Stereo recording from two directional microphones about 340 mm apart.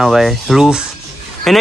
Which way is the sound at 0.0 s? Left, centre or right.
Centre.